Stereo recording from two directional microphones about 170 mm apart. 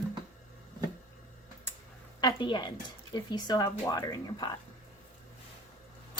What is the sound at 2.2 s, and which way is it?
A woman's voice, 25° left (ahead or behind).